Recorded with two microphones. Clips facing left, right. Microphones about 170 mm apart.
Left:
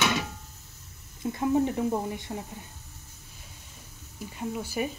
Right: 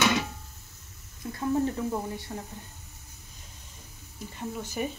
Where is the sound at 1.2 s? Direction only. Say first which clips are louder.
Left 2 dB; 20° left (ahead or behind).